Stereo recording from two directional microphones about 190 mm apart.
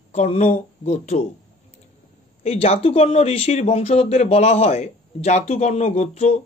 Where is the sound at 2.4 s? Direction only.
35° left (ahead or behind).